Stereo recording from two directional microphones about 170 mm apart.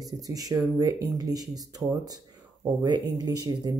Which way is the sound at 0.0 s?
20° right (ahead or behind).